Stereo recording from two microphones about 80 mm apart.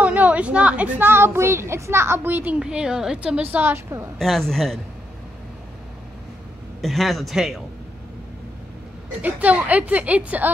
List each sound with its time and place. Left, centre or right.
0.0 s a woman's voice: centre
2.6 s a woman's voice: centre
3.6 s a woman's voice: right
4.2 s a man's voice: centre
6.8 s a man's voice: centre
9.2 s a woman's voice: centre